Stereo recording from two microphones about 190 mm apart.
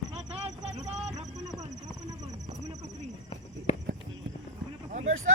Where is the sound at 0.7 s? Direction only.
35° right (ahead or behind).